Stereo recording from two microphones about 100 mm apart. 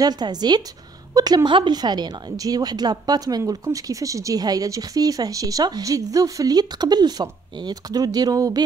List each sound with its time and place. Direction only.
0.0 s a woman's voice: 45° right (ahead or behind)